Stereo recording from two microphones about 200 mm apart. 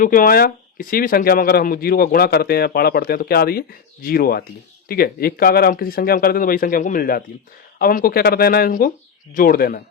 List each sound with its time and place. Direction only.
0.0 s speech: 45° left (ahead or behind)